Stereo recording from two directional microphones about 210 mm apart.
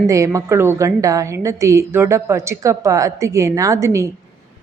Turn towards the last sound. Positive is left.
turn(degrees=-15)  # may be behind; listen again after turning